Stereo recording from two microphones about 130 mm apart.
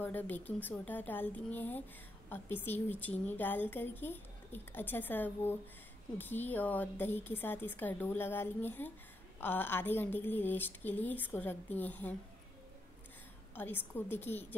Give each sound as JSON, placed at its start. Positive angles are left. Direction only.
{"t": 0.0, "sound": "a woman's voice", "side_deg": 15}
{"t": 13.6, "sound": "a woman's voice", "side_deg": 15}